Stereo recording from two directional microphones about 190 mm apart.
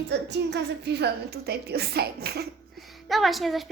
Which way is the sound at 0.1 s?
60° right (ahead or behind).